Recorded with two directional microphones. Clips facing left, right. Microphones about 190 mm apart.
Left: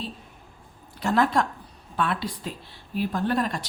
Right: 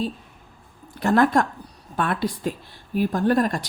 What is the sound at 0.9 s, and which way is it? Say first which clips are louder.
Speech: right 4 dB; 55° right (ahead or behind).